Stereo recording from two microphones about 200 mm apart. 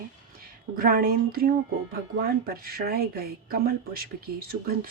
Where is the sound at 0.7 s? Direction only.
45° right (ahead or behind).